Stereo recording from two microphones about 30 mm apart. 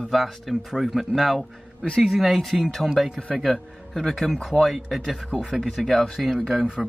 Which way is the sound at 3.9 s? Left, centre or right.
Centre.